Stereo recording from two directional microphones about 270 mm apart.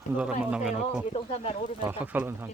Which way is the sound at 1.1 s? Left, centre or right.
Left.